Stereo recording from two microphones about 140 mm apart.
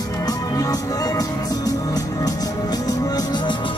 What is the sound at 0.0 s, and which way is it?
Music, 25° left (ahead or behind).